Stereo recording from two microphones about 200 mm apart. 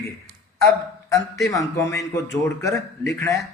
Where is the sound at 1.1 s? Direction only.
15° left (ahead or behind).